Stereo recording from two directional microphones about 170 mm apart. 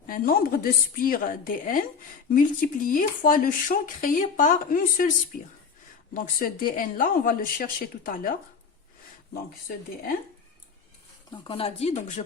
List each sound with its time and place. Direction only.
0.1 s speech: 60° left (ahead or behind)
6.1 s speech: 55° left (ahead or behind)
11.3 s speech: 30° left (ahead or behind)